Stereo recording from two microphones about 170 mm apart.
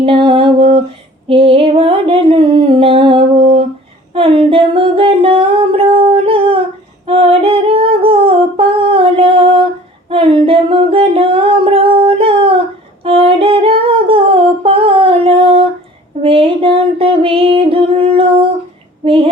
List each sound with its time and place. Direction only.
0.0 s a sound: 30° right (ahead or behind)
1.3 s music: 35° right (ahead or behind)
4.1 s humming: 35° right (ahead or behind)
7.0 s female singing: 35° right (ahead or behind)
10.1 s singing: 35° right (ahead or behind)
13.0 s humming: 35° right (ahead or behind)
16.2 s female singing: 35° right (ahead or behind)